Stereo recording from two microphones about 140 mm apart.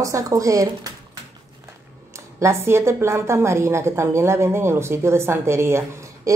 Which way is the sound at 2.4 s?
20° right (ahead or behind).